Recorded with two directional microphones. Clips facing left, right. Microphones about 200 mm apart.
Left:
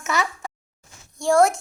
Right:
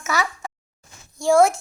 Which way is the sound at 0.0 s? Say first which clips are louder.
Even; centre (ahead or behind).